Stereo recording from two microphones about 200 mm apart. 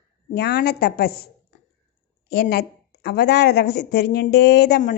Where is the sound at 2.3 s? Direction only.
50° left (ahead or behind).